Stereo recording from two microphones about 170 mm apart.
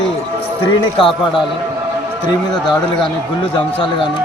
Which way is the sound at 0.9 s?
30° left (ahead or behind).